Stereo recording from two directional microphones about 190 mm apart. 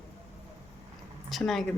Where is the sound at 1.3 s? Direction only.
Centre (ahead or behind).